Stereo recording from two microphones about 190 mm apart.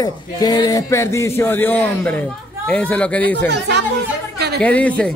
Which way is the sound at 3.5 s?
60° right (ahead or behind).